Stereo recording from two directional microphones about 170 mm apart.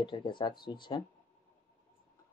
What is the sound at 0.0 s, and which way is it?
Speech, 25° left (ahead or behind).